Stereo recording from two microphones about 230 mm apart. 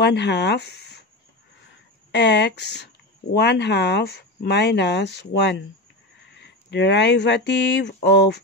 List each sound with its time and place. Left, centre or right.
0.0 s speech: left
2.1 s speech: left